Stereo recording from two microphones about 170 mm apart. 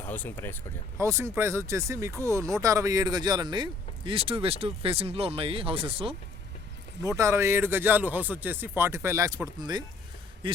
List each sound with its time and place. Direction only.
0.0 s speech: 10° left (ahead or behind)
0.9 s speech: 15° right (ahead or behind); by 6.1 s 35° right (ahead or behind)
7.0 s speech: 20° right (ahead or behind)
10.4 s a sound: 30° right (ahead or behind)